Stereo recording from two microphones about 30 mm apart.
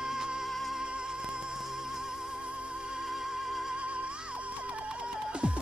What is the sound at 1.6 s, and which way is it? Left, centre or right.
Music, centre.